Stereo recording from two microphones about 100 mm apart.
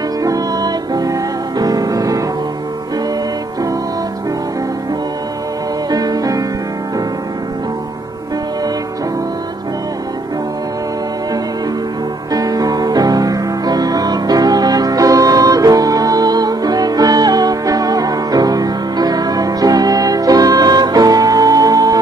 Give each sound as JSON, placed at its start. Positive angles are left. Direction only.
{"t": 0.2, "sound": "music", "side_deg": -40}
{"t": 5.9, "sound": "music", "side_deg": -40}
{"t": 12.3, "sound": "music", "side_deg": -40}